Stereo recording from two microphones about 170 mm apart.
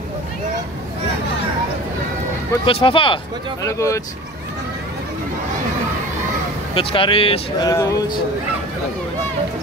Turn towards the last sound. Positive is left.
turn(degrees=20)  # may be behind; listen again after turning